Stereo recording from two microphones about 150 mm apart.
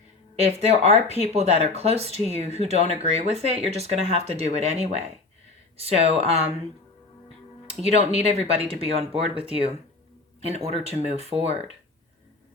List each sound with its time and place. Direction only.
0.7 s speech: 45° right (ahead or behind)
7.7 s speech: 40° right (ahead or behind)